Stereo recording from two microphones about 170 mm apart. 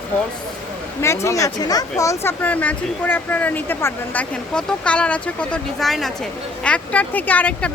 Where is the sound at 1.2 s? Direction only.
20° left (ahead or behind).